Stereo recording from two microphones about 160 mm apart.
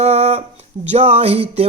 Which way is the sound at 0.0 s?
40° right (ahead or behind).